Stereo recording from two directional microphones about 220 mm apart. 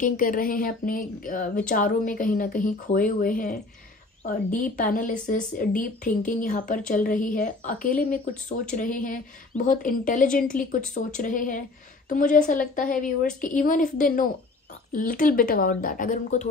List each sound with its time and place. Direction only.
0.0 s a woman's voice: 40° left (ahead or behind)
4.7 s a woman's voice: 35° left (ahead or behind)